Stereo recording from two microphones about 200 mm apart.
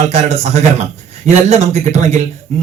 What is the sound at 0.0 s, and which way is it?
Speech, 35° right (ahead or behind).